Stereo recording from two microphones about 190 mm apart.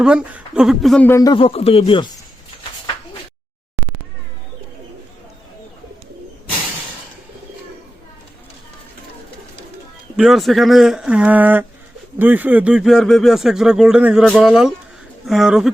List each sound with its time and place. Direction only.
0.0 s speech: 5° right (ahead or behind)
1.1 s speech: 20° left (ahead or behind)
10.2 s speech: centre (ahead or behind)